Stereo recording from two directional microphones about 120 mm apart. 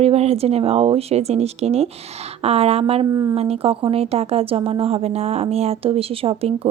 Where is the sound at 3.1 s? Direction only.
30° right (ahead or behind).